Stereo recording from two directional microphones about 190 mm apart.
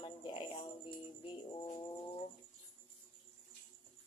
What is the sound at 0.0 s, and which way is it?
Music, 25° left (ahead or behind).